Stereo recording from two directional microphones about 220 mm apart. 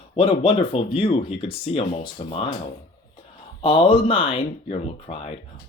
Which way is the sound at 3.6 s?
25° left (ahead or behind).